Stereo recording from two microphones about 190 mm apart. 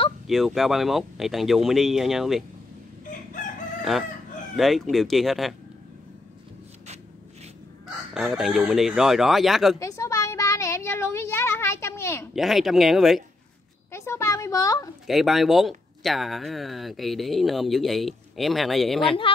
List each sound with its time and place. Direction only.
0.3 s speech: centre (ahead or behind)
4.6 s speech: centre (ahead or behind)
8.1 s speech: centre (ahead or behind)
9.8 s a sound: 15° left (ahead or behind)
12.4 s speech: centre (ahead or behind)
13.9 s a sound: 15° left (ahead or behind)
15.0 s speech: centre (ahead or behind)